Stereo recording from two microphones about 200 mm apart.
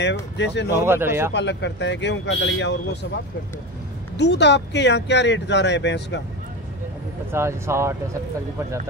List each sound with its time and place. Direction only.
0.0 s speech: 60° left (ahead or behind)
0.8 s speech: 10° right (ahead or behind)
1.3 s speech: 60° left (ahead or behind)
4.2 s speech: 60° left (ahead or behind)
7.3 s speech: 15° right (ahead or behind)